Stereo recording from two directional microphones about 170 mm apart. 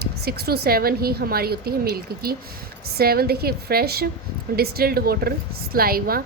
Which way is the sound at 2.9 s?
65° right (ahead or behind).